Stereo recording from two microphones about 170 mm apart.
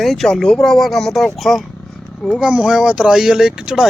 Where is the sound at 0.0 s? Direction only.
Centre (ahead or behind).